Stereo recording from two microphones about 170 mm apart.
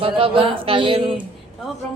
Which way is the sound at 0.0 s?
30° right (ahead or behind).